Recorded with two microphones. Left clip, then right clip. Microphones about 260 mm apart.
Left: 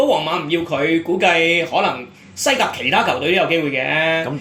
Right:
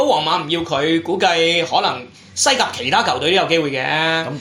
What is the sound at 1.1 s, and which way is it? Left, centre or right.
Speech, right.